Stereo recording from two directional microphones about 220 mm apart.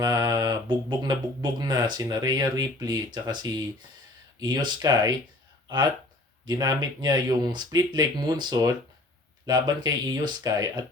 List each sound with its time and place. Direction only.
0.0 s speech: 15° right (ahead or behind)